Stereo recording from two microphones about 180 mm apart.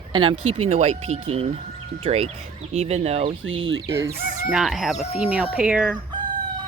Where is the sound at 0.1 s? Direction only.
30° right (ahead or behind).